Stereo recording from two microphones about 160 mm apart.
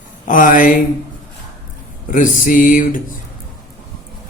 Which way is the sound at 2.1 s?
55° left (ahead or behind).